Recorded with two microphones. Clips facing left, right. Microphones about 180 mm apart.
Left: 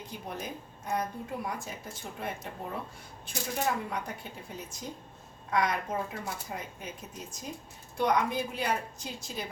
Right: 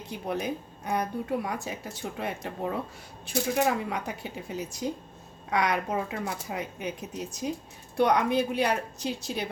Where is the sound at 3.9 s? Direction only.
70° right (ahead or behind).